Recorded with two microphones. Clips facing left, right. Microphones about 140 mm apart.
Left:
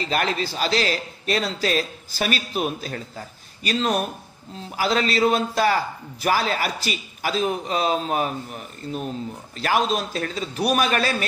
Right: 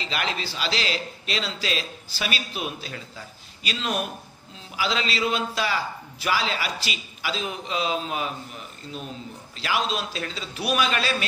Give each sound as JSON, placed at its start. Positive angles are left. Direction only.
{"t": 0.0, "sound": "a man's voice", "side_deg": 45}